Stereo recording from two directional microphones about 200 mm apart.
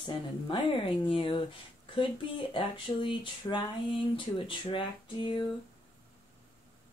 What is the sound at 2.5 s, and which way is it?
Speech, 25° left (ahead or behind).